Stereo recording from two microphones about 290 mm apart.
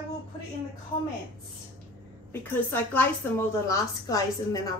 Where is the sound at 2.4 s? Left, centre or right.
Centre.